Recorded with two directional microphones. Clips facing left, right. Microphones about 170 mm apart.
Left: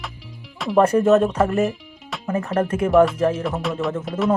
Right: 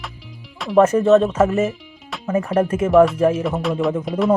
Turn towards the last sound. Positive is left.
turn(degrees=0)  # may be behind; listen again after turning